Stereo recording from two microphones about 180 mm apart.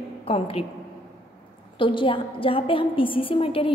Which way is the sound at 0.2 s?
30° left (ahead or behind).